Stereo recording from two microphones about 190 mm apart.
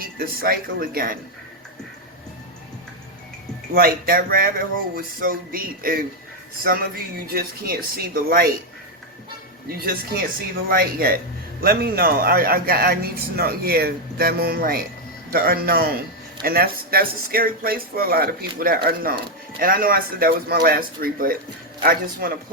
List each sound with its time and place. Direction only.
0.0 s speech: 50° right (ahead or behind)
3.8 s speech: 50° right (ahead or behind)
9.6 s speech: 50° right (ahead or behind)